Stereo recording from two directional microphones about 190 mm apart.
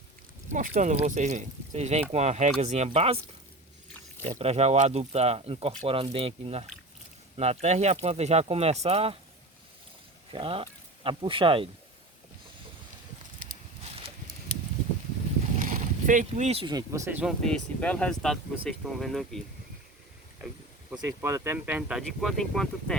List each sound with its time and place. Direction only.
0.4 s speech: 40° right (ahead or behind)
4.2 s speech: 35° right (ahead or behind)
10.3 s speech: 30° right (ahead or behind)
15.5 s speech: 45° right (ahead or behind); by 17.3 s 10° right (ahead or behind)
17.4 s speech: 5° left (ahead or behind)
21.0 s speech: 15° right (ahead or behind); by 23.0 s 5° left (ahead or behind)